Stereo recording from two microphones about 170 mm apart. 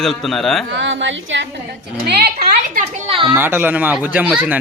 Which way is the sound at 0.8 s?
90° right.